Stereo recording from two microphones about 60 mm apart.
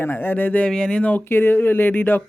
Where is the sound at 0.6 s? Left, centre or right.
Centre.